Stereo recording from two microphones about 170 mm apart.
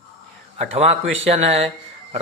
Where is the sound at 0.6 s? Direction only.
35° right (ahead or behind).